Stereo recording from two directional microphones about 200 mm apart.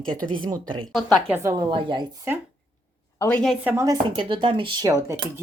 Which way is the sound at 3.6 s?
10° right (ahead or behind).